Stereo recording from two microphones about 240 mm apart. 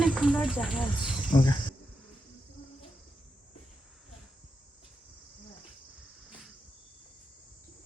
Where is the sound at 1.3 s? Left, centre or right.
Centre.